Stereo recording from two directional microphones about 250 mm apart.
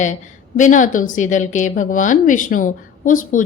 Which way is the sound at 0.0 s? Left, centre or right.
Left.